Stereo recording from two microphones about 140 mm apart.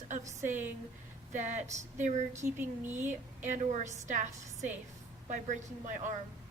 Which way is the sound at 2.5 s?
15° right (ahead or behind).